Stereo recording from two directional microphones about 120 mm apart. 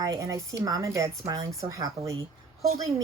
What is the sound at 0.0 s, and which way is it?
A woman's voice, 25° right (ahead or behind).